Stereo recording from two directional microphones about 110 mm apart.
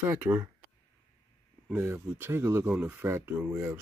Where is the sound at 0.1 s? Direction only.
20° right (ahead or behind).